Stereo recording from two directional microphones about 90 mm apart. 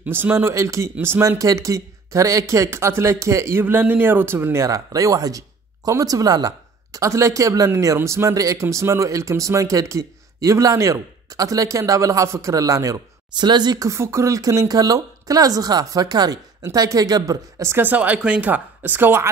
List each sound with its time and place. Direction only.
0.0 s speech: 20° right (ahead or behind)
1.4 s speech: 40° right (ahead or behind)
3.6 s speech: 20° right (ahead or behind)
4.6 s speech: 40° right (ahead or behind)
13.3 s speech: 55° right (ahead or behind)
13.8 s speech: 30° right (ahead or behind)